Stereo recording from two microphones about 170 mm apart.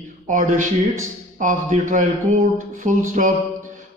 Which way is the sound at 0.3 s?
50° right (ahead or behind).